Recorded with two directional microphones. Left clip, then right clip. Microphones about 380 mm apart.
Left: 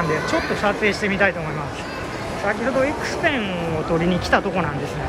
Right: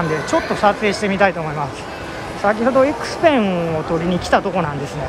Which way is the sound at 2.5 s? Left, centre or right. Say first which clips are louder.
Right 6 dB; centre.